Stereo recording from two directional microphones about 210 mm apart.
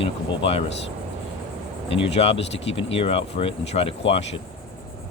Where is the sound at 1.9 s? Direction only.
30° left (ahead or behind).